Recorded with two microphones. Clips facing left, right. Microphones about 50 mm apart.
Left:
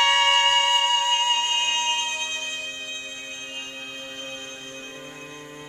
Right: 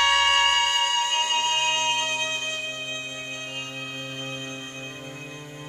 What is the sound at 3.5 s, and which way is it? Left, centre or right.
Music, centre.